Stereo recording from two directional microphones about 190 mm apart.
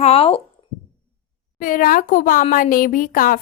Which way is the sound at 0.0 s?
30° left (ahead or behind).